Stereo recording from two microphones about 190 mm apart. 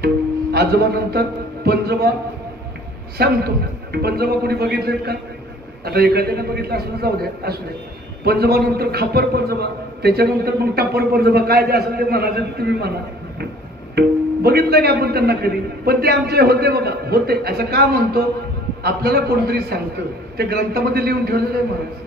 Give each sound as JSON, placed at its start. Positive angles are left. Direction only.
{"t": 0.0, "sound": "a man's voice", "side_deg": -55}
{"t": 3.2, "sound": "a man's voice", "side_deg": -55}
{"t": 13.9, "sound": "a man's voice", "side_deg": -55}